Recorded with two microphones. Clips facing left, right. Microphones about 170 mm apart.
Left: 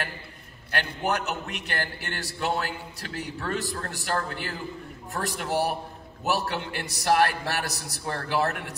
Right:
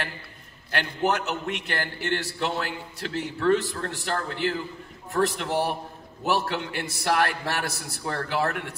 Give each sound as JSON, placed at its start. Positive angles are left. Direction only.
{"t": 0.7, "sound": "a man's voice", "side_deg": 40}